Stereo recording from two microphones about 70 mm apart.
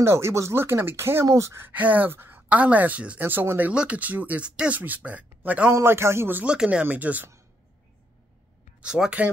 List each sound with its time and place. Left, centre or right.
0.0 s speech: right
1.2 s speech: right
1.7 s speech: right
3.7 s speech: centre
5.7 s speech: right
6.4 s speech: centre
8.8 s speech: centre